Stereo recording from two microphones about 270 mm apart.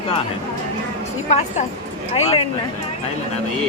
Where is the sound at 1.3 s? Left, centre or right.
Left.